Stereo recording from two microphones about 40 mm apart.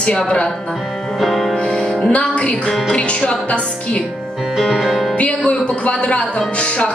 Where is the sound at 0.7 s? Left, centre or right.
Centre.